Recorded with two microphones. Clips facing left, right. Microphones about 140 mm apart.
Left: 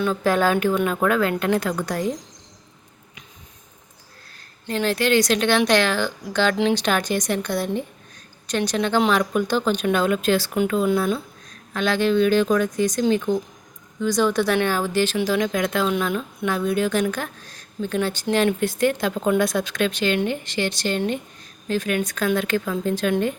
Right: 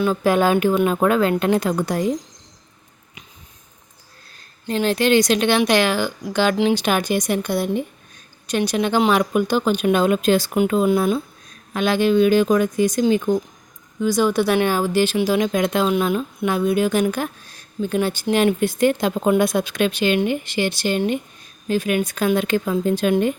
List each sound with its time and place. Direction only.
0.0 s speech: 10° right (ahead or behind)
4.7 s speech: 20° right (ahead or behind)